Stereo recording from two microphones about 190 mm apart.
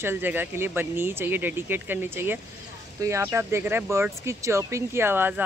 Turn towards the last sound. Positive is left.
turn(degrees=-10)  # may be behind; listen again after turning